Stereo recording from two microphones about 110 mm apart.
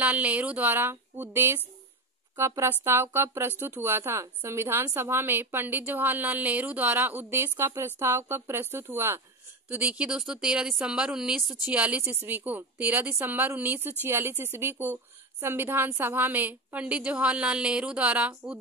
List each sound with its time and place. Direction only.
0.0 s a woman's voice: 10° right (ahead or behind)